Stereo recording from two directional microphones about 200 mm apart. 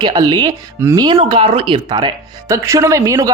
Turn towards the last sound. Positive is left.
turn(degrees=-15)  # may be behind; listen again after turning